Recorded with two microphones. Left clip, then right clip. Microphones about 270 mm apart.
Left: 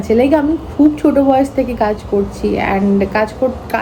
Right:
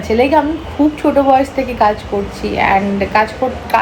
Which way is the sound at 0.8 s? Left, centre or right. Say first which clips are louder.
Left 2 dB; centre.